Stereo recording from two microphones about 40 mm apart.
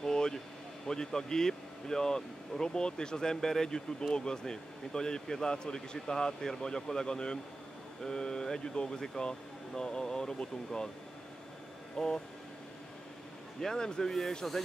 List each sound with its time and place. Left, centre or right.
0.0 s a sound: centre
0.8 s speech: centre
12.0 s speech: centre
13.6 s speech: centre